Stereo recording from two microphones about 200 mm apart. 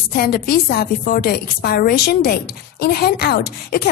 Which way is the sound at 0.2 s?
50° left (ahead or behind).